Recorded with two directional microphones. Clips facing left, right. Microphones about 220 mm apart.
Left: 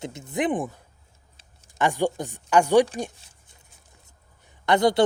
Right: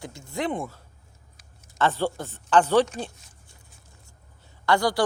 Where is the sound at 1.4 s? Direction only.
30° left (ahead or behind).